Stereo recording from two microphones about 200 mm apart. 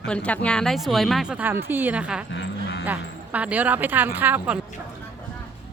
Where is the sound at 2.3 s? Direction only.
65° left (ahead or behind).